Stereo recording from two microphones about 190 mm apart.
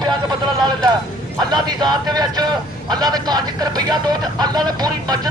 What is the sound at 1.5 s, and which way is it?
Speech, 20° right (ahead or behind).